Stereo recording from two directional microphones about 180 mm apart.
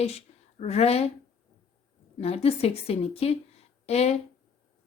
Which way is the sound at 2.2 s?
35° left (ahead or behind).